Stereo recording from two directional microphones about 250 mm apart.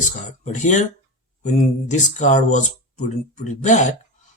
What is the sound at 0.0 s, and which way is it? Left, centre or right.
Speech, left.